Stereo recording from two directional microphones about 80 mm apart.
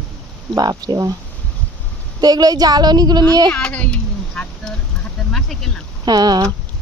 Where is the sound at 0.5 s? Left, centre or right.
Right.